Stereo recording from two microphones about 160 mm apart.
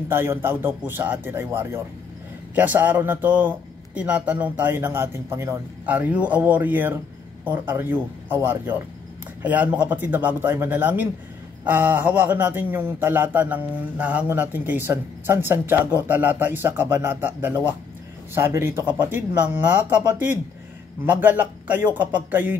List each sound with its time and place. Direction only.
0.1 s a man's voice: 15° right (ahead or behind)